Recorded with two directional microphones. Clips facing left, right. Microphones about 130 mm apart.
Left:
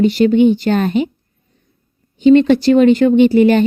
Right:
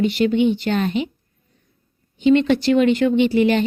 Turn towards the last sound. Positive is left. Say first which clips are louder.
# left 6 dB
turn(degrees=45)  # may be behind; listen again after turning